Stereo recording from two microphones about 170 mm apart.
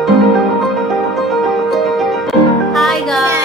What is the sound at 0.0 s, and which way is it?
Music, centre (ahead or behind).